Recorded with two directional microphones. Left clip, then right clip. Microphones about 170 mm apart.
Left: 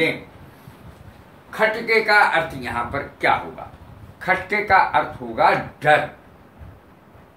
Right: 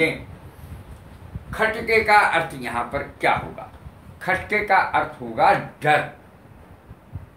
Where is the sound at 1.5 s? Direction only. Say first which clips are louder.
Left 2 dB; 25° right (ahead or behind).